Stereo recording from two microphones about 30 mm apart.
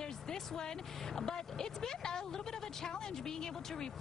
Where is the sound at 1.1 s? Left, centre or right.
Centre.